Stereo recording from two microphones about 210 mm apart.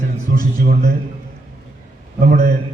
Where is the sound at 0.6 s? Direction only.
45° right (ahead or behind).